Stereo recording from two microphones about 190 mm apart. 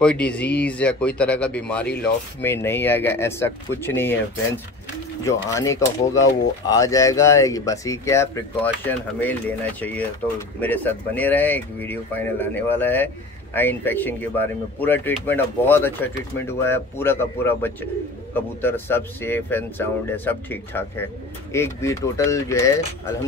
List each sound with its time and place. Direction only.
0.0 s speech: 5° left (ahead or behind)